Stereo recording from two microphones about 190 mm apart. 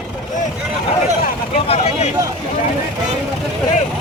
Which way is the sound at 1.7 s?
35° left (ahead or behind).